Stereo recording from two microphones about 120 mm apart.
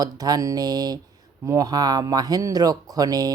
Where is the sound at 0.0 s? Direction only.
30° right (ahead or behind).